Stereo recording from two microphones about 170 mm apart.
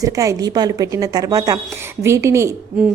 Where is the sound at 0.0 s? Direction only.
20° right (ahead or behind).